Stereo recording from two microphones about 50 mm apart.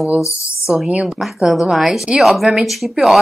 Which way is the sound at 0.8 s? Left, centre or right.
Right.